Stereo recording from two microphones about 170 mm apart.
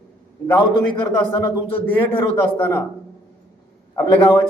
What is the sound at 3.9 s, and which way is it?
Speech, 15° left (ahead or behind).